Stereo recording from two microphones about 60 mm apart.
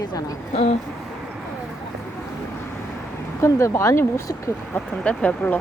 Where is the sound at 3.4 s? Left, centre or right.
Left.